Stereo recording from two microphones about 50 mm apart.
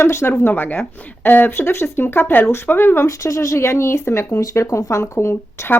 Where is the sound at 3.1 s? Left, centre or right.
Left.